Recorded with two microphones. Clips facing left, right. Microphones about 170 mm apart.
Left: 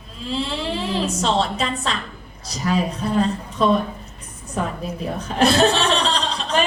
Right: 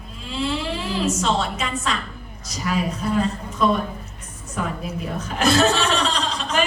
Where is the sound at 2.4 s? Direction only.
30° left (ahead or behind).